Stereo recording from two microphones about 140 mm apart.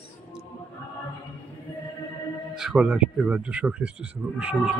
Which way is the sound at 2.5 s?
5° right (ahead or behind).